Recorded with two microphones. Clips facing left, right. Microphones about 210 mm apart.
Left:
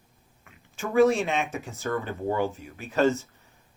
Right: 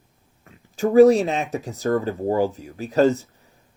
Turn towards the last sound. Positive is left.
turn(degrees=-35)  # may be behind; listen again after turning